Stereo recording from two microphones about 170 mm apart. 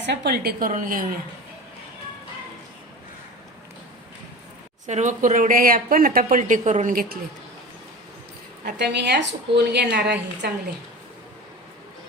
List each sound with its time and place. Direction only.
0.0 s a woman's voice: 90° right; by 0.7 s 65° right (ahead or behind)
0.7 s speech: 50° right (ahead or behind)
4.9 s speech: 45° right (ahead or behind)
8.6 s a woman's voice: 90° right